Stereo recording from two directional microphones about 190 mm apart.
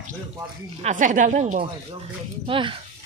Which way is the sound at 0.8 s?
40° right (ahead or behind).